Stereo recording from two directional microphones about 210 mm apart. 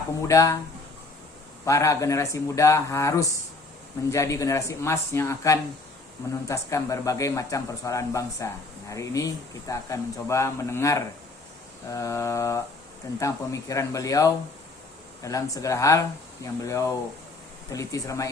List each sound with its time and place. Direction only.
0.2 s speech: 15° left (ahead or behind)
1.6 s speech: 15° left (ahead or behind)